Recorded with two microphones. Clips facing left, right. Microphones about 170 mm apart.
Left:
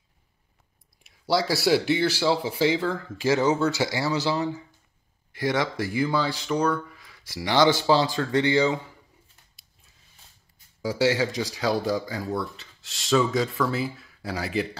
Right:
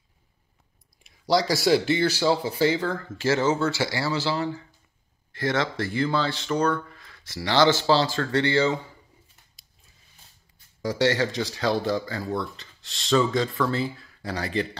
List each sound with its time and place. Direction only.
1.0 s speech: 5° left (ahead or behind)
10.8 s speech: 5° left (ahead or behind)